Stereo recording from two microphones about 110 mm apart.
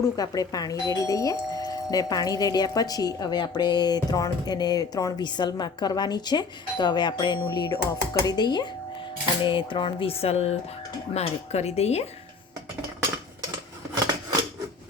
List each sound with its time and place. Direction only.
0.0 s speech: 35° left (ahead or behind)
9.4 s a sound: 50° left (ahead or behind); by 10.5 s 70° left (ahead or behind)
11.1 s speech: 75° left (ahead or behind)
13.9 s scissors: 35° right (ahead or behind)